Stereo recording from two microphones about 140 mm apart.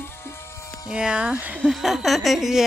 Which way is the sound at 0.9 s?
5° right (ahead or behind).